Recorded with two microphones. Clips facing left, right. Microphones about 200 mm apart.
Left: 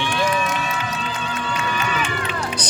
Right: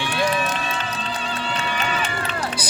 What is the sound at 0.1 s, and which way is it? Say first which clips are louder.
Run: right 1 dB; 35° right (ahead or behind).